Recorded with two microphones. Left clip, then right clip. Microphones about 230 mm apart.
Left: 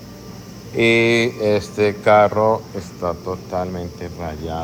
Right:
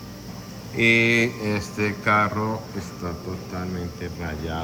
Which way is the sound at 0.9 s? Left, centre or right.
Right.